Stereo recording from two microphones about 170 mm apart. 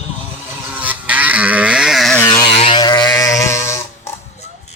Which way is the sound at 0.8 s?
10° right (ahead or behind).